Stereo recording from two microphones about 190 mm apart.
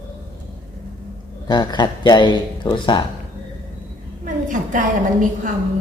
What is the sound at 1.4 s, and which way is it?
Speech, 25° left (ahead or behind).